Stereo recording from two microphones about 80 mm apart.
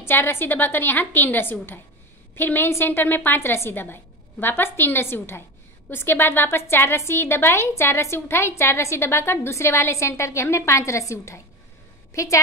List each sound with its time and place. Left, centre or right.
0.0 s a woman's voice: left